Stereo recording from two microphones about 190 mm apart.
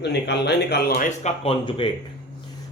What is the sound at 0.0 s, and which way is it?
Speech, 60° left (ahead or behind).